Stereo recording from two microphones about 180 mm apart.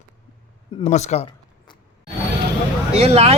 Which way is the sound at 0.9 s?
40° left (ahead or behind).